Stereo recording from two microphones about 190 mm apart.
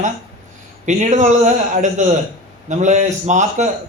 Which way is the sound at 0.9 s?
40° right (ahead or behind).